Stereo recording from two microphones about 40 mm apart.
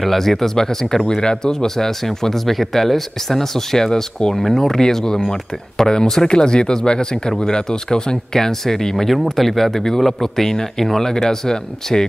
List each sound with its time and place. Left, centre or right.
0.0 s speech: centre
1.2 s speech: centre